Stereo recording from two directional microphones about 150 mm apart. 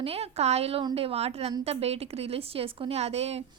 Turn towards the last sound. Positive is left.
turn(degrees=-45)  # may be behind; listen again after turning